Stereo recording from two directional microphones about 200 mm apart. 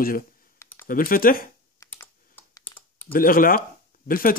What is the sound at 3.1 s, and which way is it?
Speech, 45° left (ahead or behind).